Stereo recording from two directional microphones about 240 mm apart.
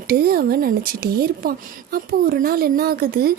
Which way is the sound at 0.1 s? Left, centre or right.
Right.